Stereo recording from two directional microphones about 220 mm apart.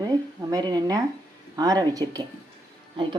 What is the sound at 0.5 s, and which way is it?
Speech, 20° right (ahead or behind).